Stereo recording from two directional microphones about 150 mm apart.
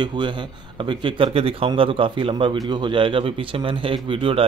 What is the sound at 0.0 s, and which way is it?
A man's voice, 30° right (ahead or behind).